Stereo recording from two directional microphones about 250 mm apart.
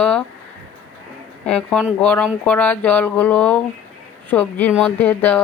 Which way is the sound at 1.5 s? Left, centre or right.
Centre.